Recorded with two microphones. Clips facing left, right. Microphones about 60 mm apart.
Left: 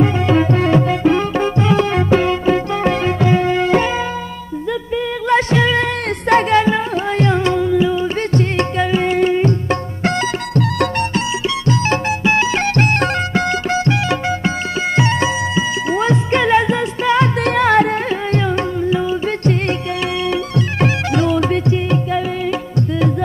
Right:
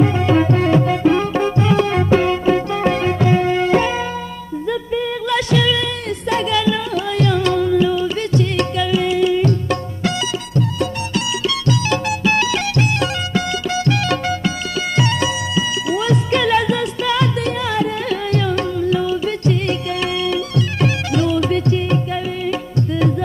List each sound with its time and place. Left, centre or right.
0.0 s music: left
0.6 s music: left
0.8 s music: left
5.3 s music: left
7.6 s music: centre
8.3 s music: left
10.5 s music: left
11.4 s music: left
12.7 s music: left
14.0 s music: left
17.4 s music: left
18.3 s music: left
20.2 s music: left
21.6 s music: left